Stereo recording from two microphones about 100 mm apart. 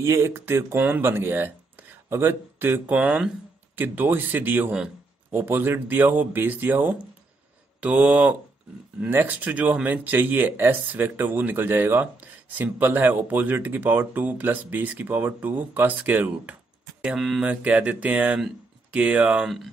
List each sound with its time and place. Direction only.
0.0 s speech: 30° right (ahead or behind)
17.0 s speech: 5° right (ahead or behind)